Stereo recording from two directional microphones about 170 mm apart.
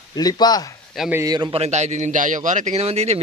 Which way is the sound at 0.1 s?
25° left (ahead or behind).